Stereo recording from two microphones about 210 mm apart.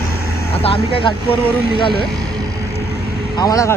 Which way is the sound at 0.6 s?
25° left (ahead or behind).